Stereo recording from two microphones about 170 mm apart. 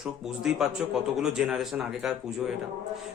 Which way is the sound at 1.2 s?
5° right (ahead or behind).